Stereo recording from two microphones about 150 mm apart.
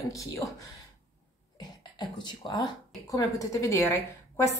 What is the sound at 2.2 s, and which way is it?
Speech, 30° left (ahead or behind).